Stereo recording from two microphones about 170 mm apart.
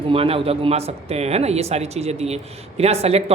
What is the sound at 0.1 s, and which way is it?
Speech, 35° right (ahead or behind).